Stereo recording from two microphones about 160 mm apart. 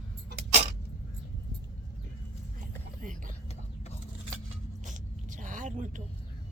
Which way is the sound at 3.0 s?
55° right (ahead or behind).